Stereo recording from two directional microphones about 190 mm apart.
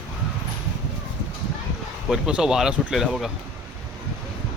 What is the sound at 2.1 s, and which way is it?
Speech, 5° right (ahead or behind).